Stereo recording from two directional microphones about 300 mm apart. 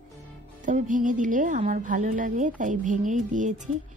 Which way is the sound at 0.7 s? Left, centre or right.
Right.